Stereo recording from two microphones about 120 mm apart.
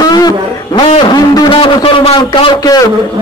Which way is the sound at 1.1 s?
35° left (ahead or behind).